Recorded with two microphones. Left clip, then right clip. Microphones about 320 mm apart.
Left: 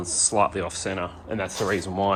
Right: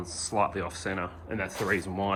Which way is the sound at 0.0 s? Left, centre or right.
Centre.